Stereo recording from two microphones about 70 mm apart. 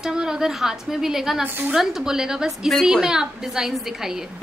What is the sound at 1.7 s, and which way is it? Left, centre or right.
A woman's voice, centre.